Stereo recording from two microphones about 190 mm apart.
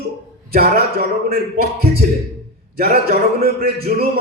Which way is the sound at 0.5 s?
55° right (ahead or behind).